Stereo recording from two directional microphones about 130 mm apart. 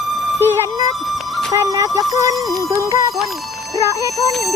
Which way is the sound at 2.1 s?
25° right (ahead or behind).